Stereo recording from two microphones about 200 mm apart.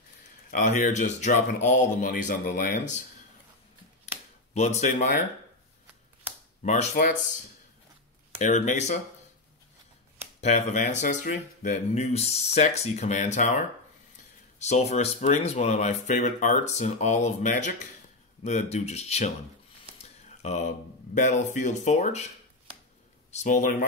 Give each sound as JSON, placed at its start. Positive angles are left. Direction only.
{"t": 0.5, "sound": "speech", "side_deg": 40}
{"t": 4.6, "sound": "speech", "side_deg": 35}
{"t": 6.6, "sound": "speech", "side_deg": 35}
{"t": 8.4, "sound": "speech", "side_deg": 35}
{"t": 10.4, "sound": "speech", "side_deg": 35}
{"t": 23.3, "sound": "speech", "side_deg": 40}